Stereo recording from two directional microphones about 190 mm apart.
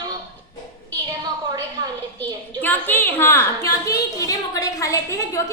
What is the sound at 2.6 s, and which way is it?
A woman's voice, 10° left (ahead or behind).